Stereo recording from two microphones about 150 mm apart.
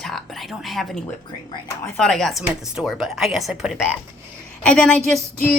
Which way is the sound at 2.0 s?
5° left (ahead or behind).